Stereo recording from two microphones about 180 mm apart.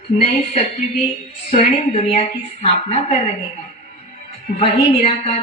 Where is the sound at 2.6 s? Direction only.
35° left (ahead or behind).